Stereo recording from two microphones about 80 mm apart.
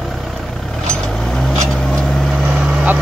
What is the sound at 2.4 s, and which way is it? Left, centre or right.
Vehicle, right.